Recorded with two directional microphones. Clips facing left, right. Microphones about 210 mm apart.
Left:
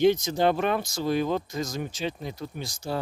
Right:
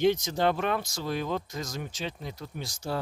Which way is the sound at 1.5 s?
20° left (ahead or behind).